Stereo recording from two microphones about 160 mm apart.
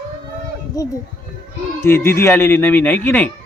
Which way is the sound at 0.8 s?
20° left (ahead or behind).